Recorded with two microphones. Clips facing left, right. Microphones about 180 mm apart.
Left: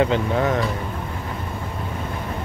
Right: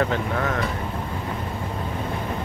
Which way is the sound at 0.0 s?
20° left (ahead or behind).